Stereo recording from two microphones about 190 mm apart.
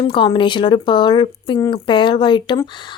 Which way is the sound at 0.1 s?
25° left (ahead or behind).